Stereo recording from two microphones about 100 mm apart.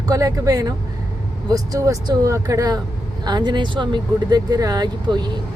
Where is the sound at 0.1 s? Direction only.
40° right (ahead or behind).